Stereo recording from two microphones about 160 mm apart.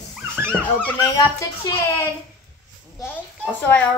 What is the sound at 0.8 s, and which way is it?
Speech, 20° left (ahead or behind).